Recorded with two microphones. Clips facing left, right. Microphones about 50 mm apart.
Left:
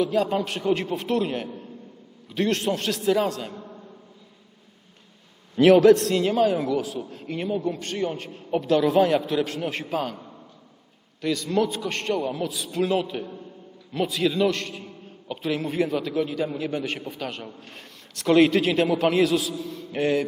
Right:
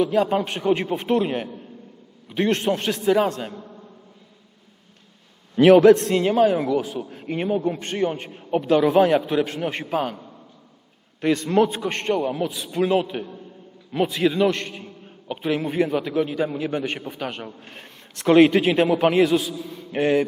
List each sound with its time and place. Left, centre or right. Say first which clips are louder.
0.0 s a man's voice: right 3 dB; centre
3.5 s a sound: right 1 dB; centre
5.5 s a man's voice: right 2 dB; centre
11.2 s a man's voice: right 5 dB; right; by 20.2 s centre